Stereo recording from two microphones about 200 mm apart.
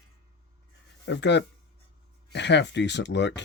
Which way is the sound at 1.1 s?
60° left (ahead or behind).